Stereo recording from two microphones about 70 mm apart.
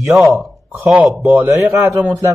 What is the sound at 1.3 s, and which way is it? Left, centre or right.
Speech, right.